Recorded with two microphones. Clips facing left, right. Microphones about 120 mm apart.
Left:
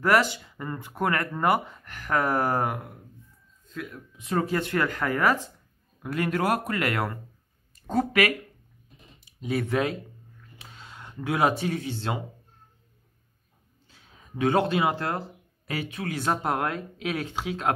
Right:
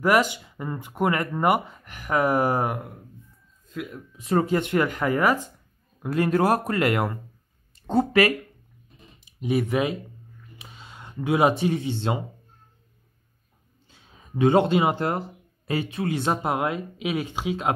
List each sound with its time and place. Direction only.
0.0 s a man's voice: 15° right (ahead or behind)
4.2 s speech: 30° right (ahead or behind); by 5.4 s 15° right (ahead or behind)
6.1 s a man's voice: 30° right (ahead or behind)
13.8 s speech: 20° right (ahead or behind)